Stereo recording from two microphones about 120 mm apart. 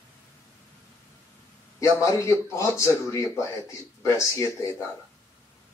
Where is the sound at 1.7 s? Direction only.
25° left (ahead or behind).